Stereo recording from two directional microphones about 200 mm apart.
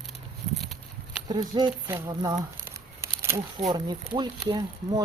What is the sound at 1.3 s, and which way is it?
Speech, 20° right (ahead or behind).